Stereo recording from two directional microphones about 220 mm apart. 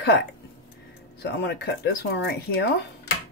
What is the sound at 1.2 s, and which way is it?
Speech, 50° left (ahead or behind).